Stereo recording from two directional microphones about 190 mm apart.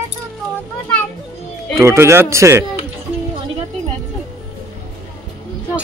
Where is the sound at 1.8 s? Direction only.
15° right (ahead or behind).